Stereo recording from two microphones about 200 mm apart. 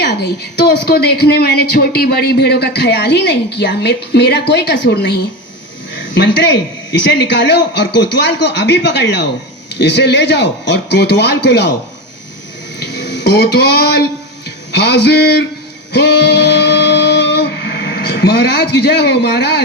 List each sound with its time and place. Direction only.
0.0 s a woman's voice: 55° left (ahead or behind)
12.8 s speech: 60° left (ahead or behind)
15.9 s a sound: 60° left (ahead or behind)